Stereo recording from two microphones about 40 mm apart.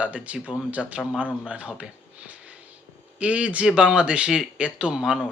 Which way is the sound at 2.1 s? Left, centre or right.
Right.